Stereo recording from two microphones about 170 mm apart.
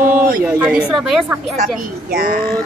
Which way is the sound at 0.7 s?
5° right (ahead or behind).